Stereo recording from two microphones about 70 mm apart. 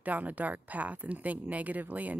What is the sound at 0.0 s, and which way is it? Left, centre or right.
Speech, right.